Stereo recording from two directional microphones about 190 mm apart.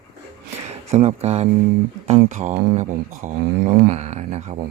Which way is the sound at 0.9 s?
35° right (ahead or behind).